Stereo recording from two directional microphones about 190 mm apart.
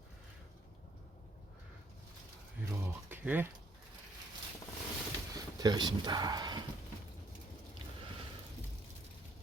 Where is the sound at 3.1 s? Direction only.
10° right (ahead or behind).